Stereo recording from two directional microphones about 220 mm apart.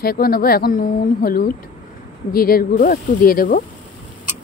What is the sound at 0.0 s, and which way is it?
Speech, 45° left (ahead or behind).